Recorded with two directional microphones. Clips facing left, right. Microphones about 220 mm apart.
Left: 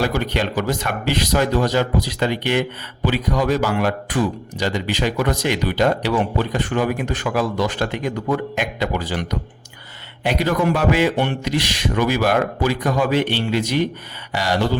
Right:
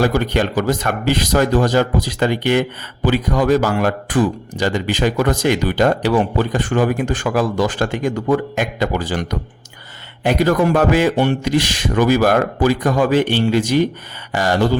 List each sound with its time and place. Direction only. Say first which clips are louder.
0.0 s speech: right 4 dB; 45° right (ahead or behind)
10.2 s speech: right 4 dB; 45° right (ahead or behind)